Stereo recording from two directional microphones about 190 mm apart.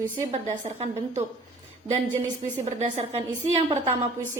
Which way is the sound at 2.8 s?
35° right (ahead or behind).